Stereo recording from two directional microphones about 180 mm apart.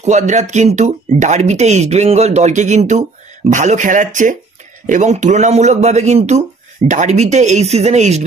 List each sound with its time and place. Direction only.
0.0 s speech: 40° right (ahead or behind)